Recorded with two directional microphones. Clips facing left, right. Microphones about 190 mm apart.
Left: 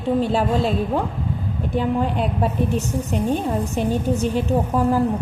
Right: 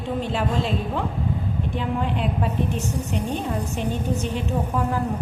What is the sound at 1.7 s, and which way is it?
A woman's voice, 40° left (ahead or behind).